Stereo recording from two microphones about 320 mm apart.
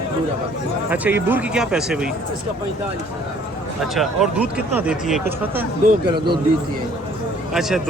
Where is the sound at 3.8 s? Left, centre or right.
Centre.